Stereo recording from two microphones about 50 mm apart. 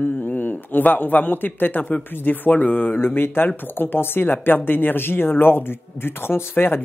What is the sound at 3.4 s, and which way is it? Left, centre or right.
Speech, left.